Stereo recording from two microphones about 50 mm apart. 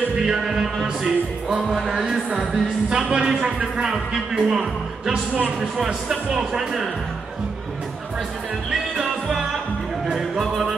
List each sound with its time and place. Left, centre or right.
0.1 s music: centre
8.6 s music: centre
10.1 s speech: centre